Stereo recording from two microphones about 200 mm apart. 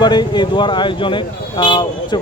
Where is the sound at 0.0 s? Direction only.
20° left (ahead or behind).